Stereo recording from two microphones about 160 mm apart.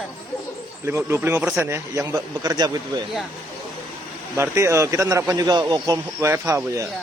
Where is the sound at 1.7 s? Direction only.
20° right (ahead or behind).